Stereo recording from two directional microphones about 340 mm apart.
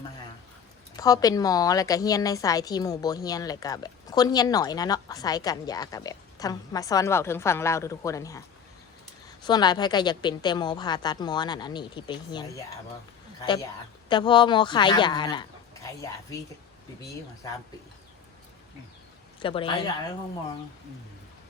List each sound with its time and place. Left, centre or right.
0.9 s a woman's voice: centre
14.1 s a woman's voice: centre
19.4 s a woman's voice: centre